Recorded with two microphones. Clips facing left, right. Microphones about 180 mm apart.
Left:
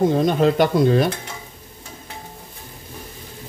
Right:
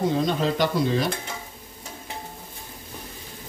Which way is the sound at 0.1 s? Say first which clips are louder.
Left 6 dB; 55° left (ahead or behind).